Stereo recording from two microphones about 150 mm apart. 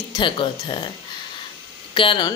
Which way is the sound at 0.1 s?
35° left (ahead or behind).